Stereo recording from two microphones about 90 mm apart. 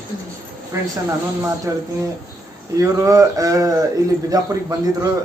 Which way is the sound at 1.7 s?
35° right (ahead or behind).